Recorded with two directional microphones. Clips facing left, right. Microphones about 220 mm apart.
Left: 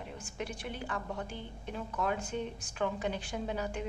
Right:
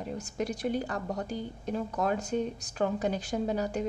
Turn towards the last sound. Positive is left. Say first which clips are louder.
# right 6 dB
turn(degrees=-40)  # may be behind; listen again after turning